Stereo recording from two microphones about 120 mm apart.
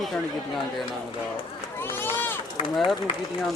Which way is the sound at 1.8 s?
20° left (ahead or behind).